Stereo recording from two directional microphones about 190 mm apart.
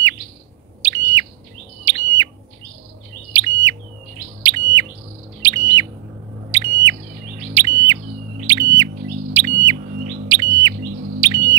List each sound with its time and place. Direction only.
0.8 s bird: 15° right (ahead or behind)
3.3 s bird: 15° right (ahead or behind)